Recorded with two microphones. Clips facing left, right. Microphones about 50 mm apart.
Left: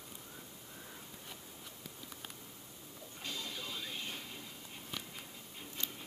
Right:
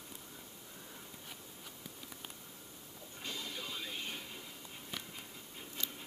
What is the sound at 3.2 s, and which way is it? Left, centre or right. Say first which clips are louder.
Music: even; centre.